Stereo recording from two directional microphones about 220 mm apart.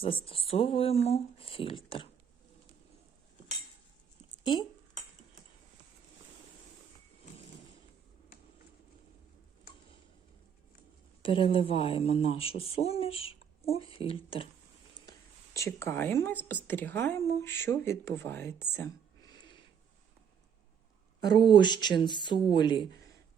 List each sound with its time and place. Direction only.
0.3 s speech: 25° left (ahead or behind)
11.2 s speech: 25° left (ahead or behind)
15.5 s speech: 15° left (ahead or behind)
18.7 s whispering: 15° left (ahead or behind)
21.2 s speech: 20° left (ahead or behind)